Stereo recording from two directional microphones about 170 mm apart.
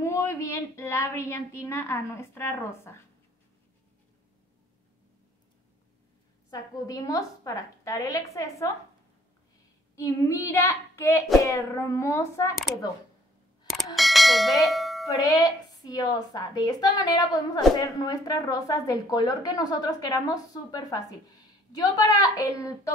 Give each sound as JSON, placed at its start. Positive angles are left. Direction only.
{"t": 0.0, "sound": "a woman's voice", "side_deg": 15}
{"t": 6.5, "sound": "a woman's voice", "side_deg": 20}
{"t": 9.9, "sound": "child singing", "side_deg": 15}
{"t": 13.9, "sound": "bell", "side_deg": 0}
{"t": 15.0, "sound": "a woman's voice", "side_deg": 20}